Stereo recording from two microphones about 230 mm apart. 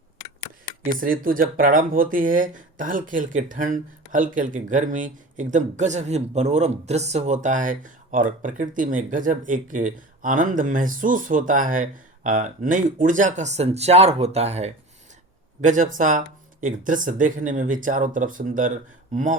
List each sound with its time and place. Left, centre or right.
1.0 s speech: right